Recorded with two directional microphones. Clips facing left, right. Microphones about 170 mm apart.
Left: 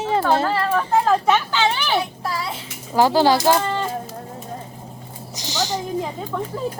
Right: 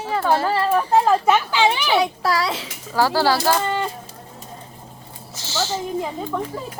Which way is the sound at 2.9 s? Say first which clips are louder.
Left 3 dB; 20° left (ahead or behind).